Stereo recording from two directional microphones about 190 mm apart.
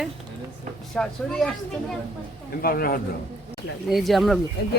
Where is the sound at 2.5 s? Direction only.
50° left (ahead or behind).